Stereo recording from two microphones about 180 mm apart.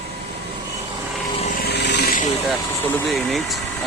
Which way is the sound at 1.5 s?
65° left (ahead or behind).